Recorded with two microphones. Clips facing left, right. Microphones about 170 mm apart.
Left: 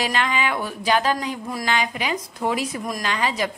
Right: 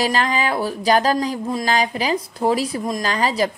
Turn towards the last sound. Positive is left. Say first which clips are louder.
# right 4 dB
turn(degrees=-40)  # may be behind; listen again after turning